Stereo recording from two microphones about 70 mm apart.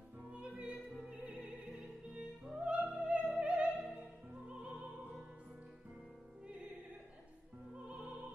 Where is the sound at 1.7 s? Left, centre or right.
Centre.